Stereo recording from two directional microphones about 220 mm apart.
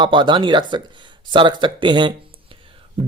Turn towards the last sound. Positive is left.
turn(degrees=-25)  # may be behind; listen again after turning